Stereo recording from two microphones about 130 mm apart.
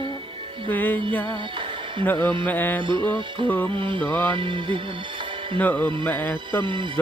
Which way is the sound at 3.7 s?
40° right (ahead or behind).